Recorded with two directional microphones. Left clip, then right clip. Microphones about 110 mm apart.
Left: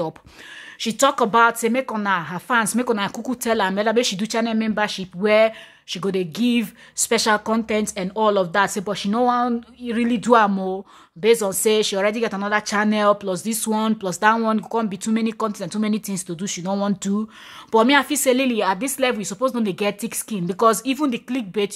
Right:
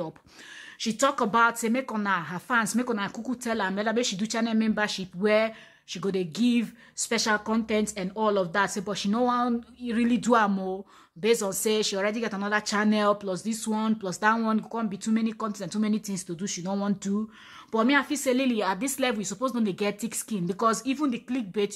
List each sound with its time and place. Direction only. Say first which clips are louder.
0.7 s a woman's voice: left 7 dB; 40° left (ahead or behind)
6.6 s a woman's voice: left 7 dB; 40° left (ahead or behind)
8.9 s a woman's voice: left 6 dB; 25° left (ahead or behind)
13.3 s a woman's voice: left 7 dB; 40° left (ahead or behind)
14.7 s a woman's voice: left 7 dB; 45° left (ahead or behind)
17.6 s speech: left 8 dB; 50° left (ahead or behind)
18.4 s a woman's voice: left 6 dB; 25° left (ahead or behind)